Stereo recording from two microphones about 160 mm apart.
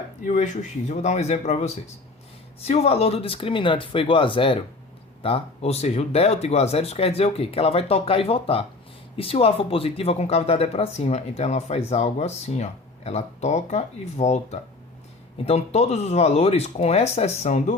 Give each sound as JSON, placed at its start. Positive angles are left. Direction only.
{"t": 0.3, "sound": "speech", "side_deg": 50}